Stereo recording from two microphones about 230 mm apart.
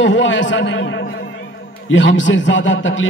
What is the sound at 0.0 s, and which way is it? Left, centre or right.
A man's voice, left.